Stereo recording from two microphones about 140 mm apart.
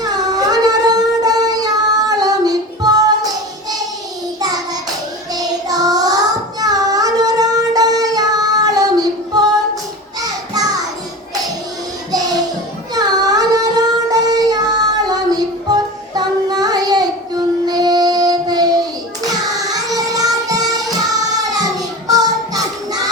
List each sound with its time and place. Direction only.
0.0 s music: 25° right (ahead or behind)
4.4 s child singing: 25° right (ahead or behind)
12.9 s child singing: 30° right (ahead or behind)
15.0 s music: 30° right (ahead or behind)
17.7 s child singing: 30° right (ahead or behind)
19.7 s music: 25° right (ahead or behind)